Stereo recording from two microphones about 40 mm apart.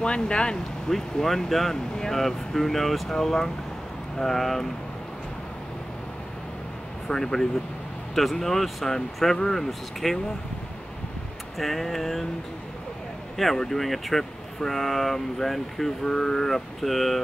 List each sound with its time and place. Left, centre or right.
0.0 s speech: left
0.8 s speech: centre
7.1 s speech: centre
11.5 s speech: centre
13.4 s speech: centre
16.0 s speech: centre